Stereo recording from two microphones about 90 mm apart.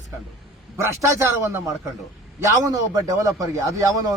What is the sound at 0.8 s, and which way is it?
Speech, 30° right (ahead or behind).